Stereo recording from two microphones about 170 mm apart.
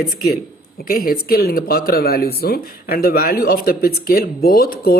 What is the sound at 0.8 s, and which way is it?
A woman's voice, 60° left (ahead or behind).